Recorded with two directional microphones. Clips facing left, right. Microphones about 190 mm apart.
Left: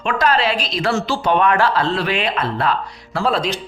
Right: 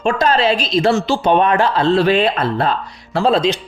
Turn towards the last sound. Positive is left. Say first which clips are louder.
# right 5 dB
turn(degrees=-25)  # may be behind; listen again after turning